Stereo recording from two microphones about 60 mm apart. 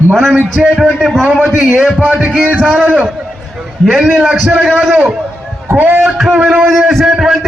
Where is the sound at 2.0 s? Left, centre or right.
Right.